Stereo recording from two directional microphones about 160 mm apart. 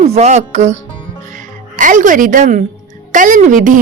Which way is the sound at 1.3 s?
55° right (ahead or behind).